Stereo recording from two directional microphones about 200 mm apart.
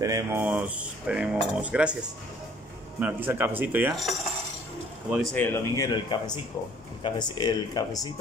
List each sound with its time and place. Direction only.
0.0 s speech: 15° right (ahead or behind)
3.0 s speech: 10° right (ahead or behind)
3.9 s dishes: centre (ahead or behind)
5.1 s speech: 5° left (ahead or behind); by 8.1 s 20° left (ahead or behind)